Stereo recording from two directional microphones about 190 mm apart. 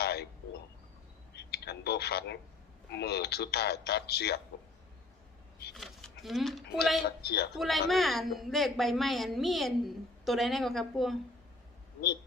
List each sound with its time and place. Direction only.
0.0 s a sound: 55° left (ahead or behind)
1.3 s telephone: 60° left (ahead or behind)
2.9 s speech: 60° left (ahead or behind)
5.7 s speech: centre (ahead or behind)
7.3 s speech: 55° left (ahead or behind)
7.5 s a woman's voice: centre (ahead or behind)